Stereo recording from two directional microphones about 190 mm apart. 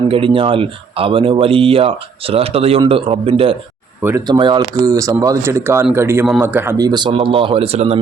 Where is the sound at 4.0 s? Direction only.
15° right (ahead or behind); by 8.0 s 30° right (ahead or behind).